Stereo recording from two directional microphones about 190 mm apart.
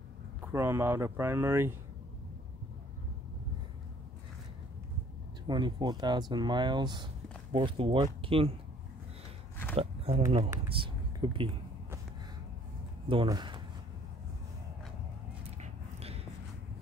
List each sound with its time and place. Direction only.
0.5 s speech: 15° right (ahead or behind)
5.5 s speech: 20° right (ahead or behind)
9.8 s speech: 30° right (ahead or behind)
10.7 s a sound: 25° right (ahead or behind)
13.1 s speech: 25° right (ahead or behind)
15.6 s a sound: 30° right (ahead or behind)